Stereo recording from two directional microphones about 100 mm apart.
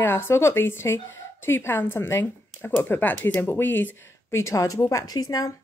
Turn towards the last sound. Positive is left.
turn(degrees=35)  # may be behind; listen again after turning